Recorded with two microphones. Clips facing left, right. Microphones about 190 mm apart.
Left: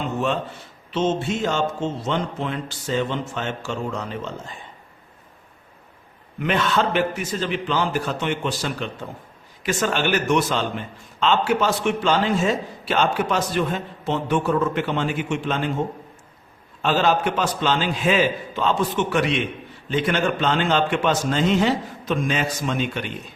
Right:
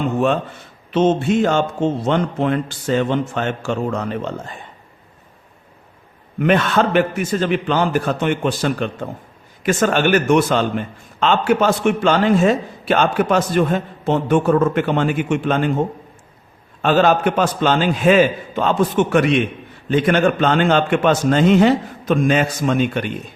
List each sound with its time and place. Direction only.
0.9 s speech: 55° right (ahead or behind)
6.4 s a man's voice: 55° right (ahead or behind)
16.8 s a man's voice: 55° right (ahead or behind)